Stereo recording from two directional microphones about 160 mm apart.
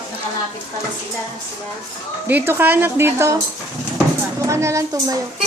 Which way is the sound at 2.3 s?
10° right (ahead or behind).